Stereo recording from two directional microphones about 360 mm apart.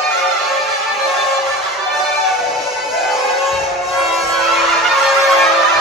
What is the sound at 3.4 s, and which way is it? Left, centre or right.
Music, centre.